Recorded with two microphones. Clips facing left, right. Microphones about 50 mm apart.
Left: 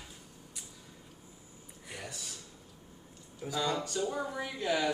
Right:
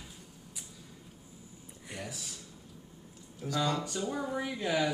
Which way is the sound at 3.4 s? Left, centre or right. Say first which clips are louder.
Right 2 dB; centre.